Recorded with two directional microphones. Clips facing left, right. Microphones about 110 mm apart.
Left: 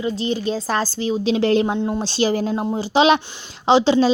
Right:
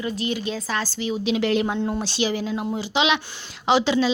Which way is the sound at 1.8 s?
20° left (ahead or behind).